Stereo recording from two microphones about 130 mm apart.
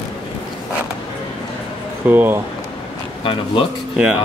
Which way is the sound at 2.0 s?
15° right (ahead or behind).